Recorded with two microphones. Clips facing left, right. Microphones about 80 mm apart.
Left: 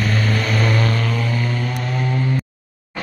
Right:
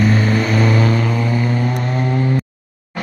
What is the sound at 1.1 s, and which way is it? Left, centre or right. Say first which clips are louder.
Music: right 4 dB; centre.